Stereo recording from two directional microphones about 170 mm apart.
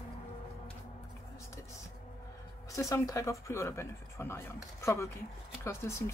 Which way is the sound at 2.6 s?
20° left (ahead or behind).